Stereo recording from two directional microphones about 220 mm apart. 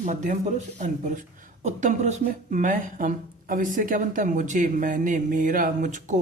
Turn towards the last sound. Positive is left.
turn(degrees=-35)  # may be behind; listen again after turning